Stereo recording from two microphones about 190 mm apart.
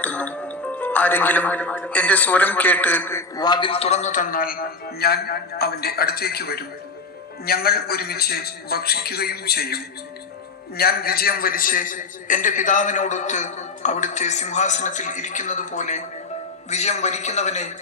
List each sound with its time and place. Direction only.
0.0 s a man's voice: 5° left (ahead or behind); by 17.7 s 40° left (ahead or behind)